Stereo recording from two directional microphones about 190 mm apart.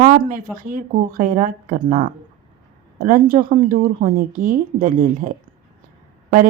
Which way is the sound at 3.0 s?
45° right (ahead or behind).